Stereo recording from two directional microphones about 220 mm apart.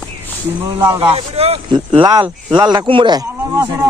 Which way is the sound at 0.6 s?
15° right (ahead or behind).